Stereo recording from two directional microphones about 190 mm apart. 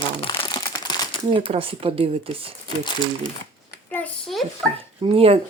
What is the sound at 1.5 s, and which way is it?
Speech, 30° right (ahead or behind).